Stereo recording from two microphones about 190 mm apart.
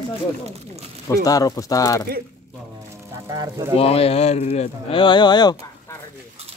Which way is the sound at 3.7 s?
30° left (ahead or behind).